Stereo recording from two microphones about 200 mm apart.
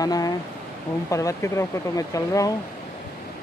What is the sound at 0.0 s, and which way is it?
Speech, 20° left (ahead or behind).